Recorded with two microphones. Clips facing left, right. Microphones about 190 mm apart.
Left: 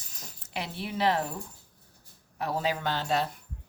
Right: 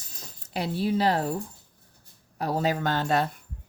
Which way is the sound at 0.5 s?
35° right (ahead or behind).